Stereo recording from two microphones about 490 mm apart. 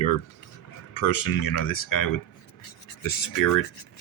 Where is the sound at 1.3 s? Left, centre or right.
Left.